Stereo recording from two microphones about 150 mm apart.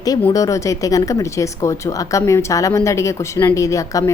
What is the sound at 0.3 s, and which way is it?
Speech, 20° left (ahead or behind).